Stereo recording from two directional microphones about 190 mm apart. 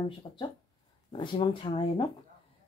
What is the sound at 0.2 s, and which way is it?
Speech, 25° left (ahead or behind).